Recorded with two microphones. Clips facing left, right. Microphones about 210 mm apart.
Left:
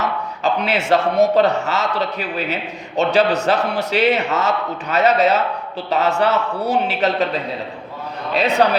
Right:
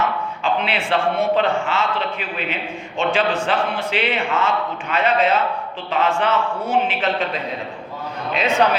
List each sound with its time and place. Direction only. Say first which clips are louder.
0.0 s a man's voice: left 1 dB; 40° left (ahead or behind)
8.3 s a man's voice: left 2 dB; 35° left (ahead or behind)